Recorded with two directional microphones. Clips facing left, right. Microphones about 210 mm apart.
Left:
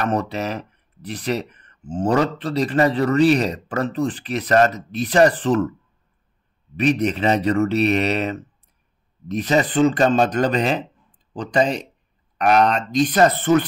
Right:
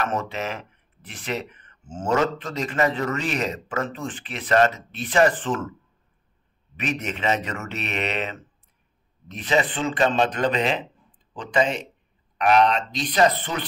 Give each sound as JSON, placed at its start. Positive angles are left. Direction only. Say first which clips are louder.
{"t": 0.0, "sound": "speech", "louder": "left 4 dB", "side_deg": 35}
{"t": 6.8, "sound": "speech", "louder": "left 9 dB", "side_deg": 35}